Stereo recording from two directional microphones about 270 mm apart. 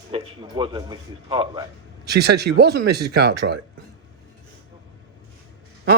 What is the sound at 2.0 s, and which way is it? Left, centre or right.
Speech, right.